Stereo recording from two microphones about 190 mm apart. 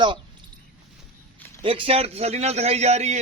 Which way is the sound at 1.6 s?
30° right (ahead or behind).